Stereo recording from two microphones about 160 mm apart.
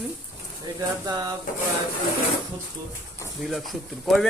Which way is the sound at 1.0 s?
25° right (ahead or behind).